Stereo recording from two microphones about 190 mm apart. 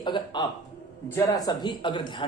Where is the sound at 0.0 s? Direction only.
25° left (ahead or behind).